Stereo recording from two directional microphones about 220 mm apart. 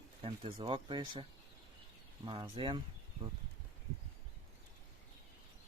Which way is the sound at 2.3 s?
20° right (ahead or behind).